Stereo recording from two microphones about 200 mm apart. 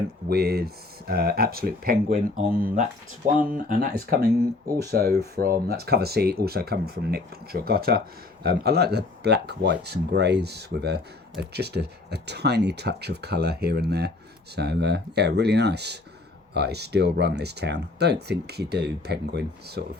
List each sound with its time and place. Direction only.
0.3 s speech: 55° right (ahead or behind)